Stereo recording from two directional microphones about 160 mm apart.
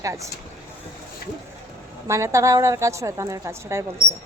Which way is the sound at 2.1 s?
15° right (ahead or behind).